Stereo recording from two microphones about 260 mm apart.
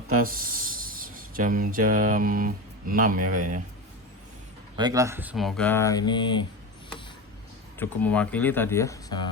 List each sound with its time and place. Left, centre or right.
0.1 s speech: right
4.8 s speech: centre
7.8 s speech: centre